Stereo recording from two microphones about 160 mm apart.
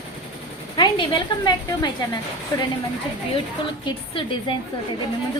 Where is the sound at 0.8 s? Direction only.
30° left (ahead or behind).